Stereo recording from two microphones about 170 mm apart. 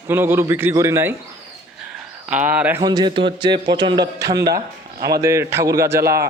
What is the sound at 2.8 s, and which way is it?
A man's voice, 25° right (ahead or behind).